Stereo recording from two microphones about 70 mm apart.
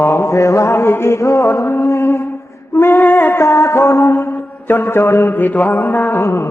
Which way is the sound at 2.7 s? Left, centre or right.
Left.